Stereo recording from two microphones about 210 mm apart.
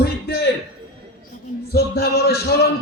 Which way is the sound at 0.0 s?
50° left (ahead or behind).